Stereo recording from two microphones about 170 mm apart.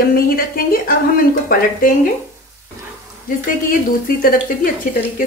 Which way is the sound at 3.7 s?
55° left (ahead or behind).